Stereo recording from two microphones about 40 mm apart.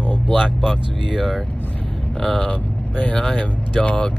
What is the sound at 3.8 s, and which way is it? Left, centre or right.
Speech, left.